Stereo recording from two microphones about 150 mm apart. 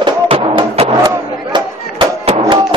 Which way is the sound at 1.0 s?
30° right (ahead or behind).